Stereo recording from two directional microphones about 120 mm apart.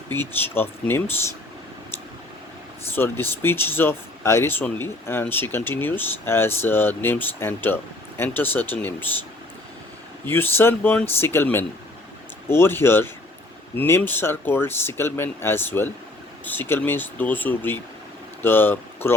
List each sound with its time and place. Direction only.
0.1 s speech: 20° left (ahead or behind)
2.9 s speech: 20° left (ahead or behind)
10.2 s speech: 20° left (ahead or behind)